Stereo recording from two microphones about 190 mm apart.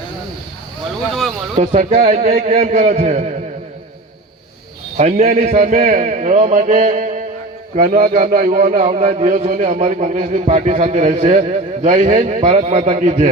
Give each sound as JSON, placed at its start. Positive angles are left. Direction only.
{"t": 1.5, "sound": "a man's voice", "side_deg": -30}
{"t": 4.9, "sound": "a man's voice", "side_deg": -40}
{"t": 7.8, "sound": "a man's voice", "side_deg": -45}